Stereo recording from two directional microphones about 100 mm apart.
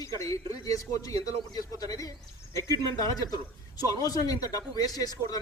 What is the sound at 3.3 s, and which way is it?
Speech, 40° left (ahead or behind).